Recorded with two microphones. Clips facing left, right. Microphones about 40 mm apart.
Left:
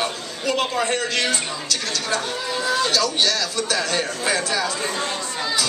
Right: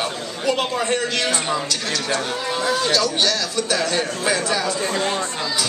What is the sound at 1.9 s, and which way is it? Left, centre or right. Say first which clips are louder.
Speech: right 2 dB; right.